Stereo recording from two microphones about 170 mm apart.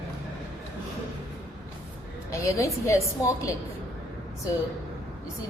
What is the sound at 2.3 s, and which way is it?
A woman's voice, 15° left (ahead or behind).